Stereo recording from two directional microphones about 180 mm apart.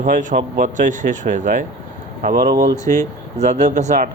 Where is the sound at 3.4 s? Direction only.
40° right (ahead or behind).